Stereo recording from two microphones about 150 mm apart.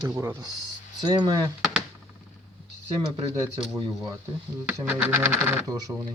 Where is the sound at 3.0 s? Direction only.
40° right (ahead or behind).